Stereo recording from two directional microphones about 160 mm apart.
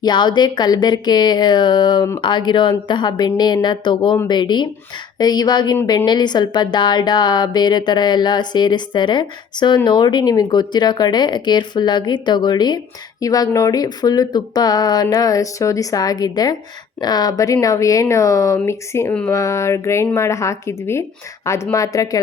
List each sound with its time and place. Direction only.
0.0 s speech: 30° left (ahead or behind)